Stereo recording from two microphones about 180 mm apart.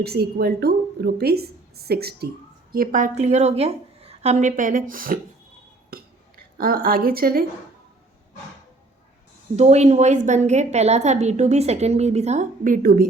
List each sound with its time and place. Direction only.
0.0 s a woman's voice: 60° right (ahead or behind)
5.9 s a sound: 55° right (ahead or behind)
9.6 s a woman's voice: 40° right (ahead or behind)